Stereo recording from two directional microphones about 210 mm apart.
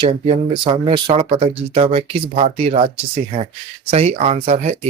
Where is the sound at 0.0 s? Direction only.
25° right (ahead or behind).